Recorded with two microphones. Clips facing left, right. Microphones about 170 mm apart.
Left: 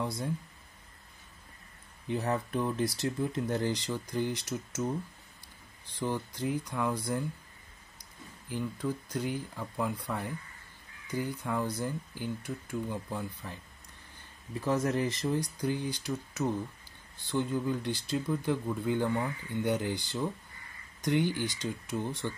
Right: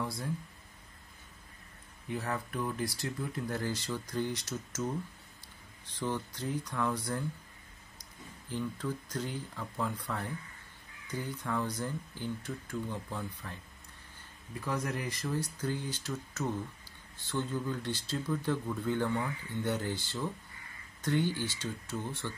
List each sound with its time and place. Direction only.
0.0 s speech: 20° left (ahead or behind)
2.0 s speech: 20° left (ahead or behind)
5.9 s speech: 10° left (ahead or behind)
8.5 s speech: 10° left (ahead or behind)
14.5 s speech: 25° left (ahead or behind)